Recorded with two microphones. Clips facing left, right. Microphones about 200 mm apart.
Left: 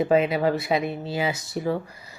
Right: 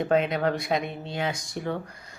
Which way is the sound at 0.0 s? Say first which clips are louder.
Left 3 dB; 5° left (ahead or behind).